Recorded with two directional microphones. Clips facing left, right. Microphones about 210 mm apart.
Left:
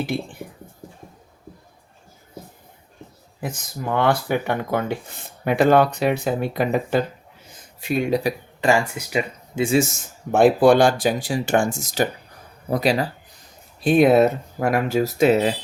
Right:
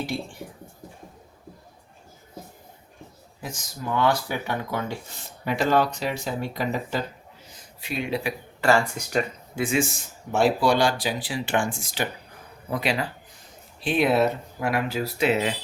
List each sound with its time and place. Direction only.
3.4 s speech: 55° left (ahead or behind)
7.8 s speech: 45° left (ahead or behind)
8.6 s speech: 10° left (ahead or behind)
9.5 s speech: 20° left (ahead or behind)
10.3 s speech: 50° left (ahead or behind)